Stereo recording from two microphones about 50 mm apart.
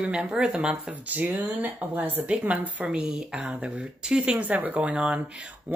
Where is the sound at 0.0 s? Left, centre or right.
Right.